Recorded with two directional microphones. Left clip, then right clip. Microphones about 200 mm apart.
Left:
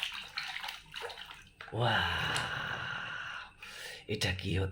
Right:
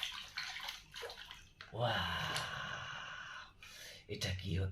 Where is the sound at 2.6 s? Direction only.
50° left (ahead or behind).